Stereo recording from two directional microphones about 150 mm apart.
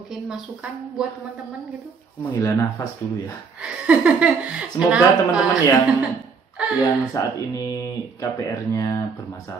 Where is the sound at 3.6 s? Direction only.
5° right (ahead or behind).